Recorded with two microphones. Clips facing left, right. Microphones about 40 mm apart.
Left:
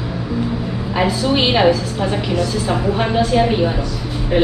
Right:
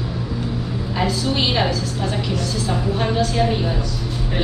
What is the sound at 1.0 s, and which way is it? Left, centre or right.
A woman's voice, left.